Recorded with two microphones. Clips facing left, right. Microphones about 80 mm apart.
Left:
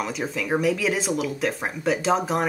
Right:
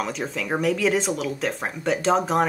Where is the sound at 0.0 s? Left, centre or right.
Centre.